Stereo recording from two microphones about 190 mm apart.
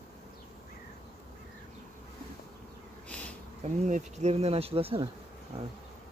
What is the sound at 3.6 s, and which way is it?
Speech, 40° right (ahead or behind).